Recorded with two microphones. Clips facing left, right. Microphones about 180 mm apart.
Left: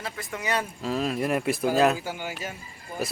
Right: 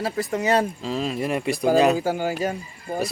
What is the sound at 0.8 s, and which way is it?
A man's voice, centre (ahead or behind).